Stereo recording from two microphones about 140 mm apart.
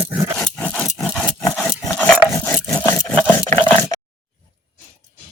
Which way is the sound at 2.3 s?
15° left (ahead or behind).